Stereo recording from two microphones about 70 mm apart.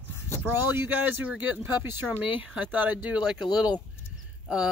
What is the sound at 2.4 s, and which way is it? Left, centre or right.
Speech, centre.